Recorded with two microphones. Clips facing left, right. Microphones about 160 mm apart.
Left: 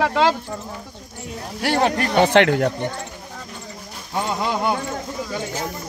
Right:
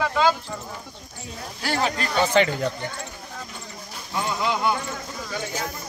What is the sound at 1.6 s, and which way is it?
Speech, 65° left (ahead or behind).